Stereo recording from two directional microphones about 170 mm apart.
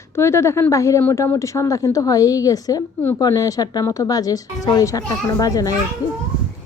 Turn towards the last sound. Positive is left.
turn(degrees=20)  # may be behind; listen again after turning